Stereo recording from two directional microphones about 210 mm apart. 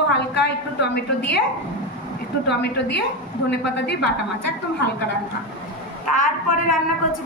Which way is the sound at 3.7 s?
55° left (ahead or behind).